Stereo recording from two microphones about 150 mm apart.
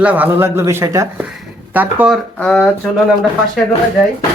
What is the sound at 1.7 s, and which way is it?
Speech, 10° right (ahead or behind).